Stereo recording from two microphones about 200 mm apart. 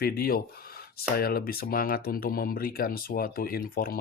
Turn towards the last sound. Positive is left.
turn(degrees=50)  # may be behind; listen again after turning